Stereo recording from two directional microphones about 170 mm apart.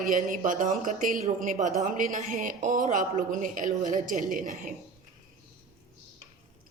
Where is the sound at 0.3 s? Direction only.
50° right (ahead or behind).